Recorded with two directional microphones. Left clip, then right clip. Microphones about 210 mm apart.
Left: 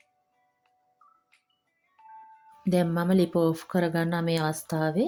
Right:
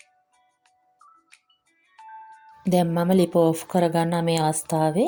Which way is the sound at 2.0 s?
25° right (ahead or behind).